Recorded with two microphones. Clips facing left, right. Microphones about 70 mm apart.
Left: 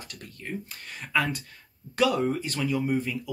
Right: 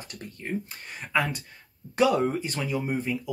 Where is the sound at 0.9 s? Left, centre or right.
Centre.